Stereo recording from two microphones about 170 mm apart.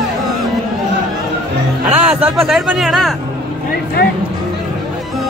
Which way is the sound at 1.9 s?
5° right (ahead or behind).